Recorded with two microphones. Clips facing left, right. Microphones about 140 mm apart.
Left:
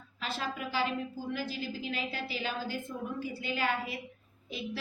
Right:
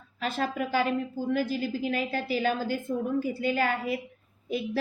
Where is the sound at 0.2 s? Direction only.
50° right (ahead or behind).